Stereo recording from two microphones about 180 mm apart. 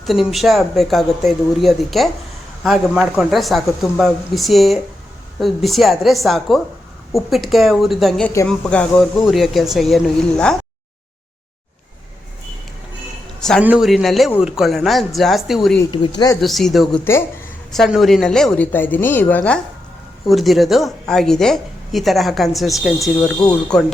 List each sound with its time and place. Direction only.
0.0 s speech: centre (ahead or behind)
13.6 s speech: 5° right (ahead or behind)
15.9 s speech: 20° left (ahead or behind)
16.4 s speech: centre (ahead or behind)
17.0 s speech: 15° left (ahead or behind)
17.7 s speech: centre (ahead or behind)
20.2 s speech: centre (ahead or behind)